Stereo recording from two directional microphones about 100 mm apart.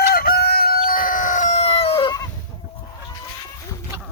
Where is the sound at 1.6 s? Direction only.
70° left (ahead or behind).